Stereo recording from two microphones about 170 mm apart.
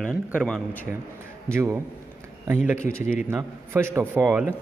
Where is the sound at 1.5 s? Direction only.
15° right (ahead or behind).